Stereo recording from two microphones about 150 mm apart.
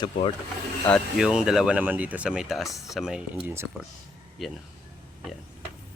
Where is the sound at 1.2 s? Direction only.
5° right (ahead or behind).